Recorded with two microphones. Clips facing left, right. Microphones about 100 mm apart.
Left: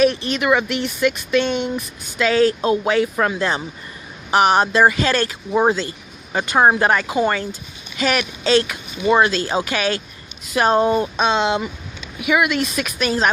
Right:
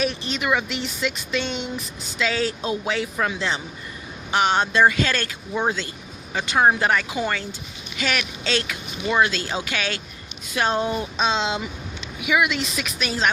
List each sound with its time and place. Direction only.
0.0 s speech: 55° left (ahead or behind)
4.3 s speech: 35° left (ahead or behind)